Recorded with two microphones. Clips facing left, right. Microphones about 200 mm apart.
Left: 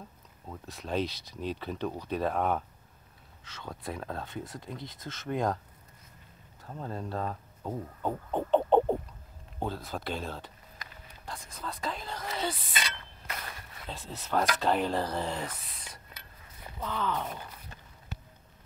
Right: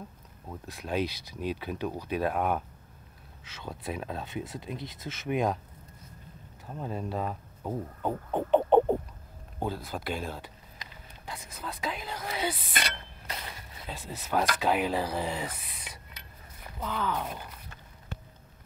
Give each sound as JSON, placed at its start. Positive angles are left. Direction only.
{"t": 0.5, "sound": "speech", "side_deg": -5}
{"t": 4.6, "sound": "speech", "side_deg": -20}
{"t": 6.7, "sound": "speech", "side_deg": -15}
{"t": 9.6, "sound": "speech", "side_deg": 0}
{"t": 13.4, "sound": "a sound", "side_deg": -15}
{"t": 14.0, "sound": "speech", "side_deg": -10}
{"t": 16.8, "sound": "speech", "side_deg": -5}